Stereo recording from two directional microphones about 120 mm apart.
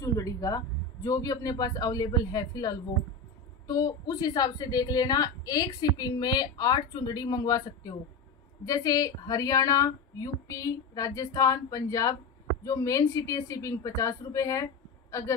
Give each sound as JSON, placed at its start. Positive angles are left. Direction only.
{"t": 0.0, "sound": "a woman's voice", "side_deg": 30}